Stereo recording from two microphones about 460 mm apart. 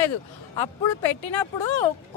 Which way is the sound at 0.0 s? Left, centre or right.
Left.